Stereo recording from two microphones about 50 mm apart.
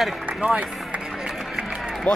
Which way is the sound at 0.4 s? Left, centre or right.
Right.